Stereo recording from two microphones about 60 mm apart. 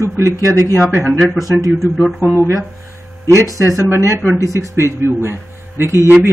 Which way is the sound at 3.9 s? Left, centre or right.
Right.